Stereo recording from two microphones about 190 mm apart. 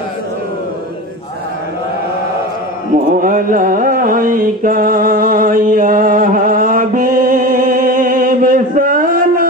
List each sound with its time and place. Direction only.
3.1 s music: 45° right (ahead or behind)